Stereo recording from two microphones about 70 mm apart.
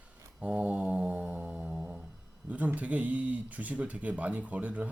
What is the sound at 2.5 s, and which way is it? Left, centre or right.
Speech, right.